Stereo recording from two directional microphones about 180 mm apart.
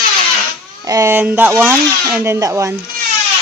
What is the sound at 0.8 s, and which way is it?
Speech, 15° right (ahead or behind).